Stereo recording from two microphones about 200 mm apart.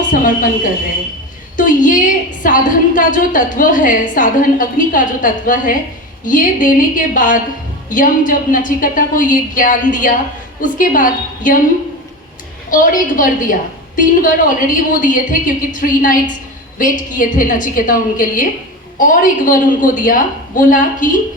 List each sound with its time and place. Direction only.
0.1 s a woman's voice: 40° left (ahead or behind)
12.7 s a woman's voice: 40° left (ahead or behind)